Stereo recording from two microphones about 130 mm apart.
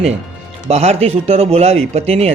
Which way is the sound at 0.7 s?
55° right (ahead or behind).